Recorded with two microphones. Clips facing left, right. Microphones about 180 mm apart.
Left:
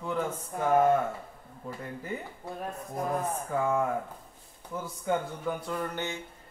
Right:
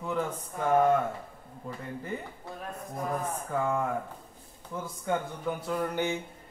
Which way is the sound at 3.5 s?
5° left (ahead or behind).